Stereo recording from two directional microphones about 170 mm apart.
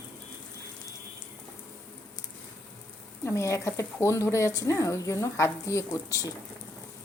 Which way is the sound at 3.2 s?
15° left (ahead or behind).